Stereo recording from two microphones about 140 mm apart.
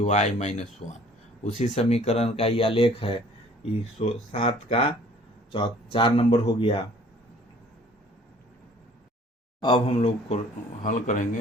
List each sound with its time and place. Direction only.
0.0 s speech: 55° left (ahead or behind); by 6.8 s 40° left (ahead or behind)
9.6 s speech: 35° left (ahead or behind); by 10.4 s 50° left (ahead or behind)
10.8 s speech: 60° left (ahead or behind)